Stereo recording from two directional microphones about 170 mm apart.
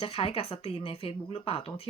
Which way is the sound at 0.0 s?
35° left (ahead or behind).